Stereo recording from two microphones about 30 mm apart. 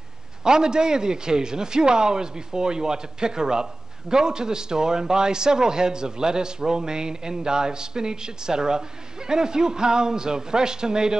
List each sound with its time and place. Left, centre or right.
0.4 s a man's voice: right